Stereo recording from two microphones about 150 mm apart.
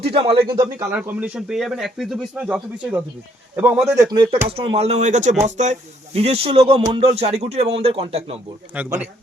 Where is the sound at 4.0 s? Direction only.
25° right (ahead or behind).